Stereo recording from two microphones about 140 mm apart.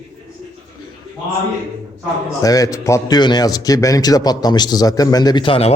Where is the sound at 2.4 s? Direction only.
25° left (ahead or behind); by 5.7 s 45° left (ahead or behind).